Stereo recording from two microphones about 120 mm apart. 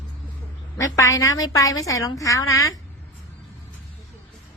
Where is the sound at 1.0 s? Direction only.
25° left (ahead or behind).